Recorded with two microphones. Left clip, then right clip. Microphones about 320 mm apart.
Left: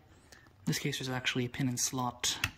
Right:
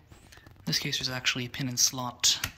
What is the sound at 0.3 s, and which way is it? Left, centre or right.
Speech, centre.